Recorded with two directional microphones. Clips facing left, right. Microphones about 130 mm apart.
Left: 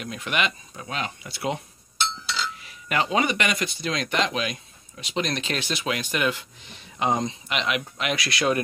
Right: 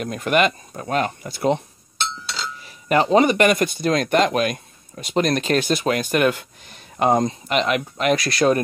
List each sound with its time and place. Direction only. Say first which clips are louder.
0.0 s speech: right 8 dB; 45° right (ahead or behind)